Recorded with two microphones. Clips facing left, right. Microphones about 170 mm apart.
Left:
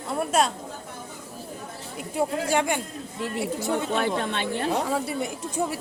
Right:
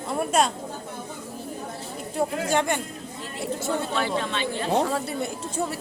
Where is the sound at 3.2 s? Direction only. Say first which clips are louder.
Left 6 dB; 70° left (ahead or behind).